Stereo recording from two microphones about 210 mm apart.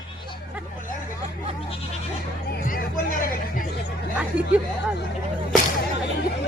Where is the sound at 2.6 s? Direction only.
40° left (ahead or behind).